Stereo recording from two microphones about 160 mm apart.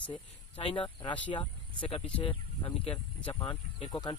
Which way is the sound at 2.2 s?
30° left (ahead or behind).